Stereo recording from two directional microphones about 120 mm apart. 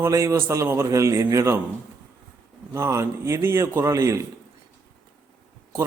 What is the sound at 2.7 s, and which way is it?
A man's voice, 25° right (ahead or behind).